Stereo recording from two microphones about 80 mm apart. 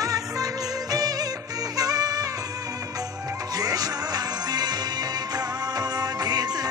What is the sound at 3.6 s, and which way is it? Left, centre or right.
Music, right.